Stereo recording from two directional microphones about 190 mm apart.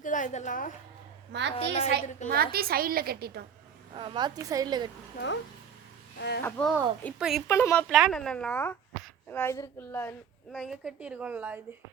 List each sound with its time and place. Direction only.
0.0 s a woman's voice: 45° left (ahead or behind)
1.3 s a woman's voice: 70° right (ahead or behind)
1.5 s a woman's voice: 35° left (ahead or behind)
2.3 s a woman's voice: 55° right (ahead or behind)
3.9 s a woman's voice: 25° right (ahead or behind)
6.1 s a child's voice: 60° left (ahead or behind)
6.4 s speech: 5° left (ahead or behind)
7.4 s speech: 15° left (ahead or behind)
10.5 s a woman's voice: centre (ahead or behind)